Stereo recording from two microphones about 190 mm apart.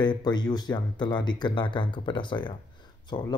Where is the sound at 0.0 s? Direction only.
20° left (ahead or behind).